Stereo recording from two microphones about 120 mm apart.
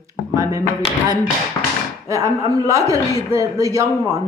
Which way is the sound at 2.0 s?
25° right (ahead or behind).